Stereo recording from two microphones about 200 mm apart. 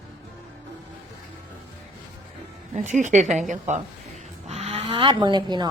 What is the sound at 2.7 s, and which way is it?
A woman's voice, 40° right (ahead or behind).